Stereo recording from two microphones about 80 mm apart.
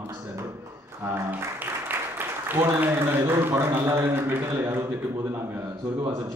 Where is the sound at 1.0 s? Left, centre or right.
Right.